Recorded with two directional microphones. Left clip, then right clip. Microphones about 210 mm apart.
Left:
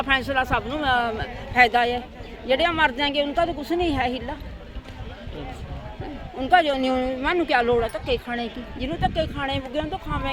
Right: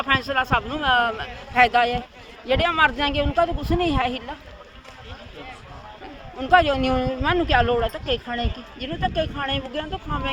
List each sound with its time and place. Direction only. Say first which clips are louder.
0.0 s a man's voice: right 1 dB; centre (ahead or behind)
6.4 s speech: right 1 dB; centre (ahead or behind)